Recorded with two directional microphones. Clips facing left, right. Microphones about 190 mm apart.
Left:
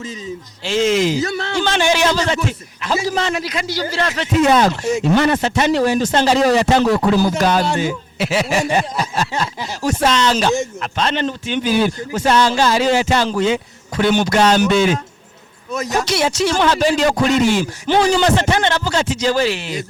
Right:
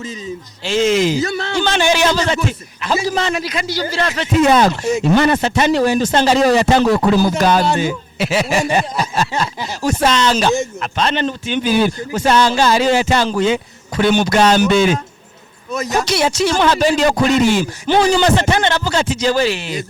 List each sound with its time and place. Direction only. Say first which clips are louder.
0.6 s speech: right 1 dB; 10° right (ahead or behind)
6.8 s speech: right 1 dB; 30° right (ahead or behind)
7.3 s speech: right 2 dB; 10° right (ahead or behind)